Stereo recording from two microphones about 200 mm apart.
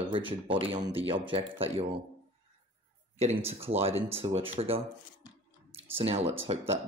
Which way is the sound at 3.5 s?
30° right (ahead or behind).